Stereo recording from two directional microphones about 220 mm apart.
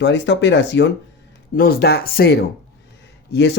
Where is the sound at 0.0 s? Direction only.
55° left (ahead or behind).